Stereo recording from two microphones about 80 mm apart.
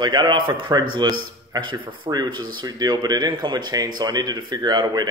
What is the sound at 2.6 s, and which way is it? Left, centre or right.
Speech, right.